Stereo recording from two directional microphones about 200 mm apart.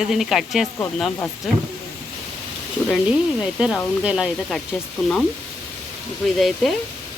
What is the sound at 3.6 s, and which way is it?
Speech, 5° right (ahead or behind).